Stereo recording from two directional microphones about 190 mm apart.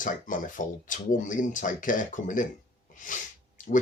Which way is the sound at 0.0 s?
45° left (ahead or behind).